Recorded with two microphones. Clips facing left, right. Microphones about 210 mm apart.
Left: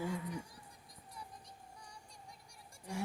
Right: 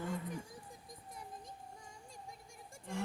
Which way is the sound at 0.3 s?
50° right (ahead or behind).